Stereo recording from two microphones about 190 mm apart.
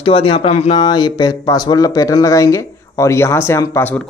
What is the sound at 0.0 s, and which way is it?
Speech, 30° left (ahead or behind).